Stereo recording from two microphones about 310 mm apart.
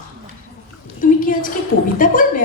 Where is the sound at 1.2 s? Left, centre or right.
Left.